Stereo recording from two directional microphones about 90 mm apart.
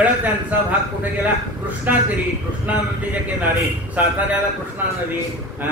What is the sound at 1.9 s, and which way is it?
Speech, 20° right (ahead or behind).